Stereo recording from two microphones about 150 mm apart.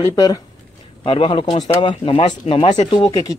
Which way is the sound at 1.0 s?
35° left (ahead or behind).